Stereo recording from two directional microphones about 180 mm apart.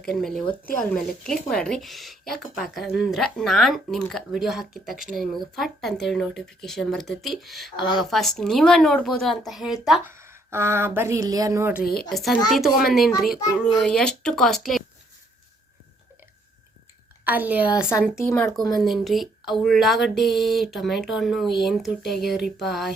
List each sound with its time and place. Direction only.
0.0 s speech: centre (ahead or behind)
7.8 s speech: 25° left (ahead or behind)
8.1 s speech: centre (ahead or behind)
10.1 s speech: 15° right (ahead or behind)
12.0 s speech: centre (ahead or behind)
17.2 s speech: 10° right (ahead or behind)
18.1 s speech: 15° left (ahead or behind)
18.4 s speech: centre (ahead or behind)